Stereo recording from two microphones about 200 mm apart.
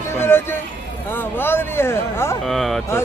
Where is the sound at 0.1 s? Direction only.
10° left (ahead or behind).